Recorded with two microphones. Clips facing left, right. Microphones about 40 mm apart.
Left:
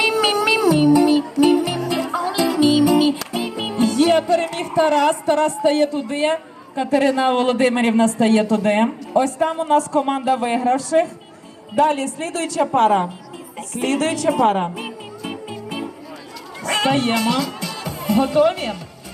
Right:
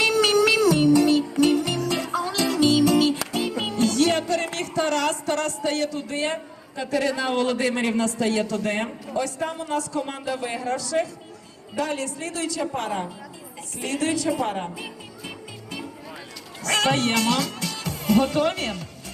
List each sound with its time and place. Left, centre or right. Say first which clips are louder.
0.0 s music: left 1 dB; centre
3.3 s speech: left 3 dB; centre; by 14.3 s left
14.4 s music: left 10 dB; left
16.6 s speech: left 3 dB; centre